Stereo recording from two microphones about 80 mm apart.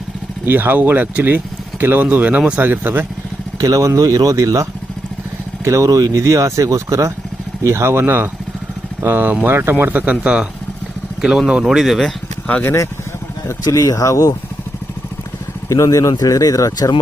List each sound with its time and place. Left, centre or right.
0.4 s speech: right
3.6 s speech: right; by 12.1 s centre
12.6 s speech: left
15.7 s speech: left